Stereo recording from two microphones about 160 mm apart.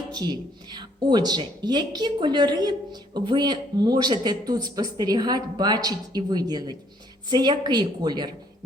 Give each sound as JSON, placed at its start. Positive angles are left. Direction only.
{"t": 0.1, "sound": "speech", "side_deg": -25}